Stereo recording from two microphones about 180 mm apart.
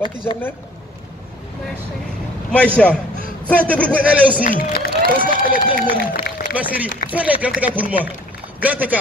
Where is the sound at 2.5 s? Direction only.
5° left (ahead or behind).